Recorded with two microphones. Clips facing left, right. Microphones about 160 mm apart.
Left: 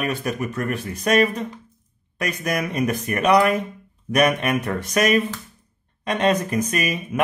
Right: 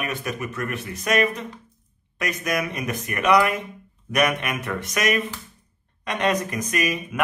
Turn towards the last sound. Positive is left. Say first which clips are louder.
# left 1 dB
turn(degrees=30)  # may be behind; listen again after turning